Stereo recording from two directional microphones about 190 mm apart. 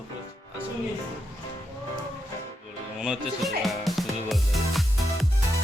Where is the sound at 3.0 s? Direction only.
Centre (ahead or behind).